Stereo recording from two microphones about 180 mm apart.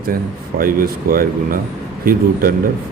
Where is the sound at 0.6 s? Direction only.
55° right (ahead or behind).